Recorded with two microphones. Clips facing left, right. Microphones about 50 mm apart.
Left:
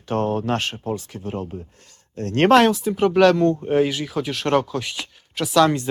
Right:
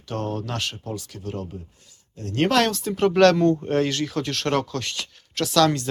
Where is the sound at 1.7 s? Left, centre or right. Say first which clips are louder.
Left 10 dB; left.